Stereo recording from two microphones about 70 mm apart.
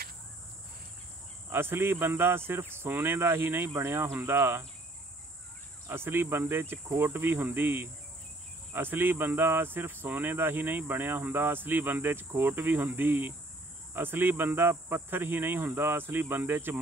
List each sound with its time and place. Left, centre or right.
1.5 s speech: right
5.9 s speech: right